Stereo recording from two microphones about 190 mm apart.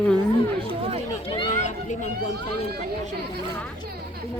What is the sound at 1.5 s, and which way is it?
Children playing, 40° left (ahead or behind).